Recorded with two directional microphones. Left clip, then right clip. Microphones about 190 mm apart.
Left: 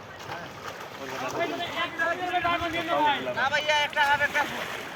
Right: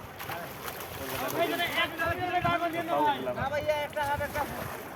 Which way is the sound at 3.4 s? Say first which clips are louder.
Left 7 dB; 40° right (ahead or behind).